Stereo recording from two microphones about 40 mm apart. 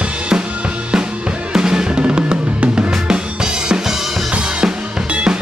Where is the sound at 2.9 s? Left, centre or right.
Centre.